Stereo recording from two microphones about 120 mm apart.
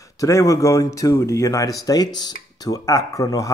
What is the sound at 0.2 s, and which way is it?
Speech, 25° left (ahead or behind).